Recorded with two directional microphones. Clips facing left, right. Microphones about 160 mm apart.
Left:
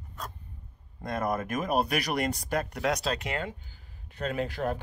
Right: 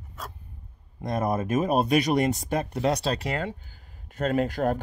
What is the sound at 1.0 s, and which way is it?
Speech, 25° right (ahead or behind).